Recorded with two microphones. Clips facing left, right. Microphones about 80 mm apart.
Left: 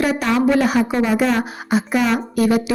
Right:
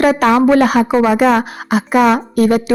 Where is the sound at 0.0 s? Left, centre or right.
Right.